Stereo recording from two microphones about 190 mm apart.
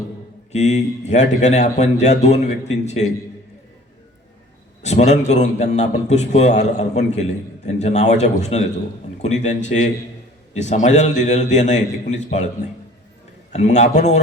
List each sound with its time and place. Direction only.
0.5 s a man's voice: 35° left (ahead or behind)
4.8 s a man's voice: 35° left (ahead or behind)
13.5 s a man's voice: 35° left (ahead or behind)